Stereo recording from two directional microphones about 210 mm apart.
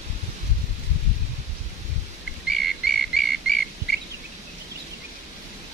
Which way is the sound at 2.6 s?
Centre (ahead or behind).